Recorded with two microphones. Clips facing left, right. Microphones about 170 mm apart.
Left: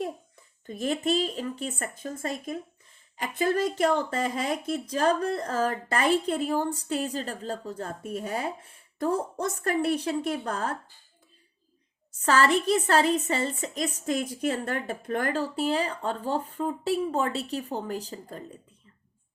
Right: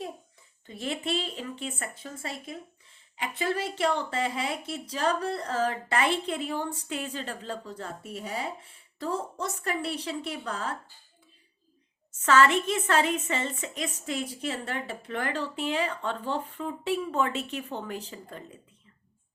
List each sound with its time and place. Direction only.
0.7 s speech: 45° left (ahead or behind)
12.2 s speech: 35° left (ahead or behind)